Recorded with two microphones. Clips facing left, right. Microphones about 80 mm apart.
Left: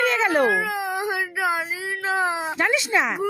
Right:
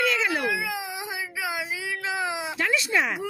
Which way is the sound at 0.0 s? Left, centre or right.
Left.